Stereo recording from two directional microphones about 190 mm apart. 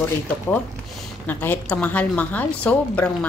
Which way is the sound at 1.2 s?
10° left (ahead or behind).